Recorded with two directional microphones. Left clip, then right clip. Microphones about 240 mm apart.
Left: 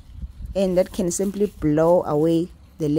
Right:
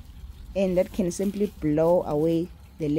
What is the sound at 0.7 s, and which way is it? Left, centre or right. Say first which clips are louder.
Speech: left 4 dB; centre.